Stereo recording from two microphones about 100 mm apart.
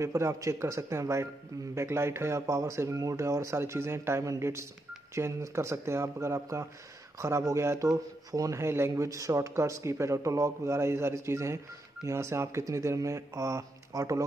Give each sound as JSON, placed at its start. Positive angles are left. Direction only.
{"t": 0.0, "sound": "speech", "side_deg": -30}